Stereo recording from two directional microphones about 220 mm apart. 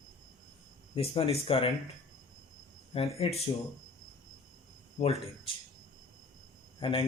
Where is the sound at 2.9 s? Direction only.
25° left (ahead or behind).